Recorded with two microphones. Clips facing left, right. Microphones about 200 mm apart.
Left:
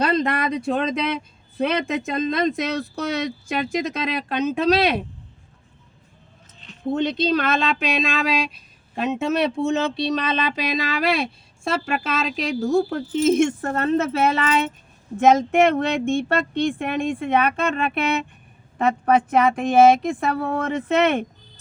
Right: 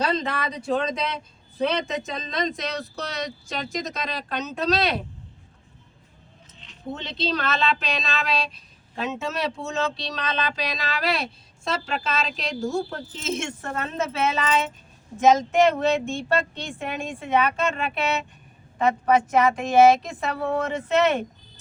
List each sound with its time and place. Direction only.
0.0 s speech: 55° left (ahead or behind)
6.6 s speech: 50° left (ahead or behind)